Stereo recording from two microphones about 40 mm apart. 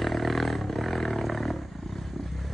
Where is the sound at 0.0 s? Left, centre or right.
Centre.